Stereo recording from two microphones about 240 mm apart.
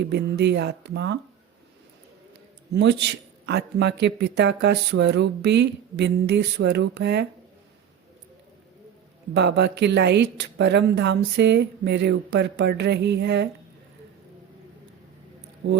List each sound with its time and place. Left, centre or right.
0.0 s speech: right
2.7 s speech: right
9.3 s speech: right